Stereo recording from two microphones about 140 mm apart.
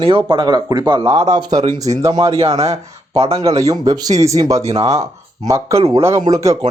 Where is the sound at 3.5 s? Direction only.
25° right (ahead or behind).